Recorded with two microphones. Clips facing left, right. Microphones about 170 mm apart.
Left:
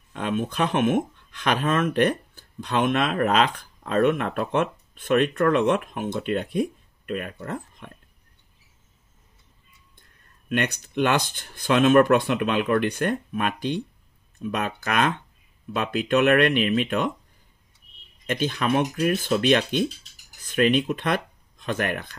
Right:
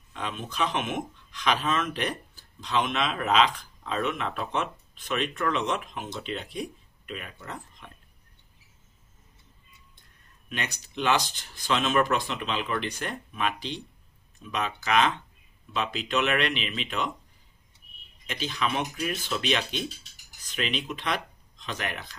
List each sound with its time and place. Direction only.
0.1 s speech: 50° left (ahead or behind)
10.5 s speech: 55° left (ahead or behind)
18.2 s speech: 50° left (ahead or behind)